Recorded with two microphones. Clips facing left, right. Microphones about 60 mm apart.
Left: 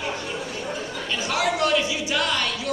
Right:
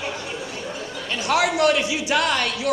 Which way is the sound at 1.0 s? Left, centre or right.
Right.